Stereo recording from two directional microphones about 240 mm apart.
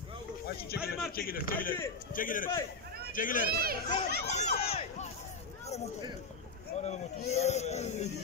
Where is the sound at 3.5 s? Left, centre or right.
Right.